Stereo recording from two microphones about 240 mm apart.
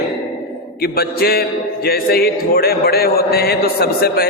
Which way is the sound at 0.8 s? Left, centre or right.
Left.